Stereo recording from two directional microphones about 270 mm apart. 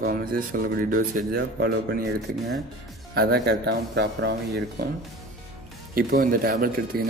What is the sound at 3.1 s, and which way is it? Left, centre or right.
Speech, right.